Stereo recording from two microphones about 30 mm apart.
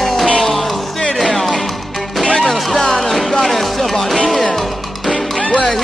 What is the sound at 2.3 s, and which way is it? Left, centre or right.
Music, centre.